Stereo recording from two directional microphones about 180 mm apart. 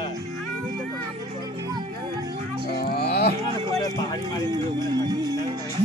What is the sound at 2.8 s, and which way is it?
Music, 60° left (ahead or behind).